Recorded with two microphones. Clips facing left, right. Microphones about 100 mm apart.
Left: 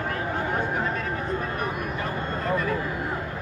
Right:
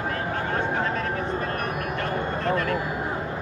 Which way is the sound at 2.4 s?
5° left (ahead or behind).